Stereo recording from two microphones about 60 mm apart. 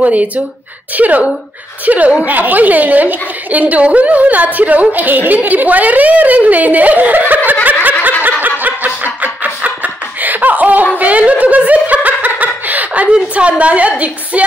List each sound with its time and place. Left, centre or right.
0.0 s a woman's voice: right
8.2 s snicker: right
10.2 s laughter: right
11.0 s speech: right